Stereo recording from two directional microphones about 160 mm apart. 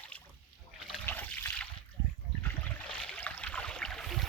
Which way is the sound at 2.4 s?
10° left (ahead or behind).